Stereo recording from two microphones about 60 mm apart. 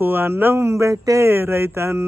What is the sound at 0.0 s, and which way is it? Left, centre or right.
Speech, right.